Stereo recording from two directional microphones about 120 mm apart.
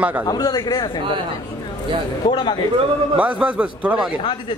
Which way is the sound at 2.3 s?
40° left (ahead or behind).